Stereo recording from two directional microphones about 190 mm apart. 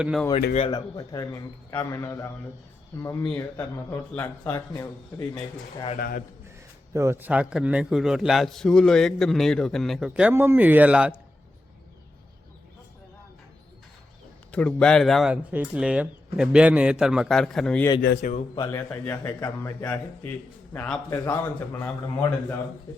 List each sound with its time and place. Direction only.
0.0 s a man's voice: centre (ahead or behind)
0.5 s speech: 25° left (ahead or behind)
6.0 s a man's voice: 50° left (ahead or behind)
6.9 s a man's voice: 15° right (ahead or behind)
14.5 s a man's voice: 5° left (ahead or behind)
18.2 s speech: 40° left (ahead or behind)
18.5 s speech: 15° left (ahead or behind)